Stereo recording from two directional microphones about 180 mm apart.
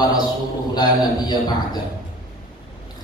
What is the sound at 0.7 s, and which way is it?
A man's voice, 20° left (ahead or behind).